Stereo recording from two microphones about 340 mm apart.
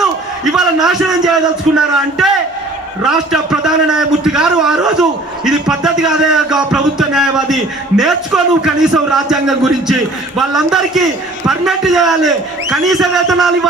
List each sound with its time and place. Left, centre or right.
0.0 s a man's voice: centre